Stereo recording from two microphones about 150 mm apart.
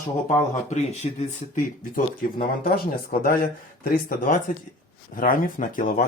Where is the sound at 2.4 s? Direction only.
75° left (ahead or behind).